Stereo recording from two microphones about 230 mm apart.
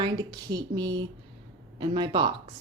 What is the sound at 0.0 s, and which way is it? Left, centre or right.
A woman's voice, centre.